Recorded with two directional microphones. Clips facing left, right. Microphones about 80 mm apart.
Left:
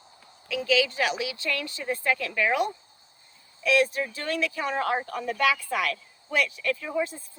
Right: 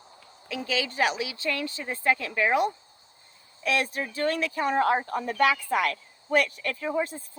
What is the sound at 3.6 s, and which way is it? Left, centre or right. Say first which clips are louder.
Speech: left 4 dB; right.